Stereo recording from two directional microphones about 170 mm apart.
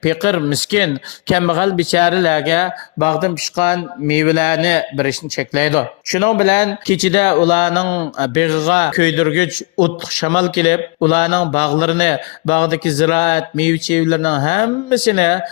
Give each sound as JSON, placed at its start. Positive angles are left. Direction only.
{"t": 0.0, "sound": "speech", "side_deg": 35}